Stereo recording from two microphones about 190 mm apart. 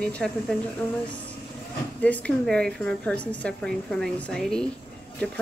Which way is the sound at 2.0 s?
5° left (ahead or behind).